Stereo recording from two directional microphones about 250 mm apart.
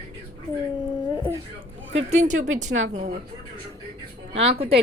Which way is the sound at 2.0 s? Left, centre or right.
Right.